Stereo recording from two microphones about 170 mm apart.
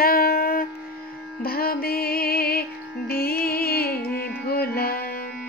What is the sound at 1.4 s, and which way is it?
Music, 60° left (ahead or behind).